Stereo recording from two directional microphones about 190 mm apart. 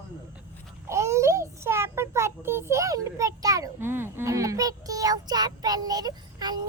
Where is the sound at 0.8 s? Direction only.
15° right (ahead or behind).